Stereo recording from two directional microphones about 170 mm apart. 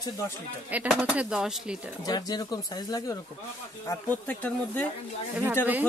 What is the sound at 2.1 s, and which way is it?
Speech, 25° left (ahead or behind).